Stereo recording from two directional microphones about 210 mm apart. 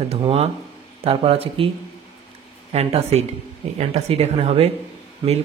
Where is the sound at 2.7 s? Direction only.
30° right (ahead or behind).